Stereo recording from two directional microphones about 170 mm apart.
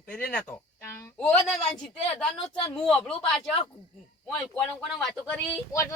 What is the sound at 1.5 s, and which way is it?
Speech, 5° left (ahead or behind).